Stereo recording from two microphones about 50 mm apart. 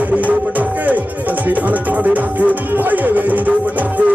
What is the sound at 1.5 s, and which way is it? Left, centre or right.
Music, right.